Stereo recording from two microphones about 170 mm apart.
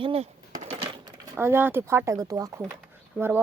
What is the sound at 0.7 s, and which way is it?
Coin, 35° right (ahead or behind).